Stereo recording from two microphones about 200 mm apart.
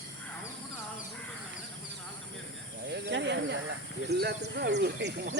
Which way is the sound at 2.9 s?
60° right (ahead or behind).